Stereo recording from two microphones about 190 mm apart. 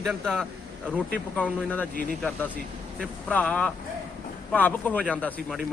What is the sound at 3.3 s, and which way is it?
Speech, 5° left (ahead or behind).